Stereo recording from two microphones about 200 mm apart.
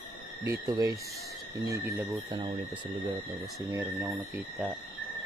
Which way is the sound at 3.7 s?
15° right (ahead or behind).